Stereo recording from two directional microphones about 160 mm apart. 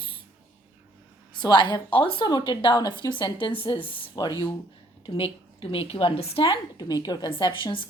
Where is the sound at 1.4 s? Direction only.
30° left (ahead or behind).